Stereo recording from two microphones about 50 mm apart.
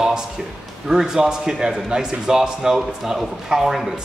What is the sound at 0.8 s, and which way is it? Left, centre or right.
Speech, centre.